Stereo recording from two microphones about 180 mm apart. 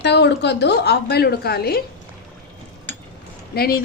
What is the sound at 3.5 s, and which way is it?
Speech, 60° left (ahead or behind).